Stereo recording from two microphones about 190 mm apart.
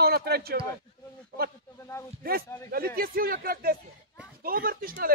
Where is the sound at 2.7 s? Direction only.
50° right (ahead or behind).